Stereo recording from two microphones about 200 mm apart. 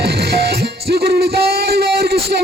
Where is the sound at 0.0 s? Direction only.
55° right (ahead or behind).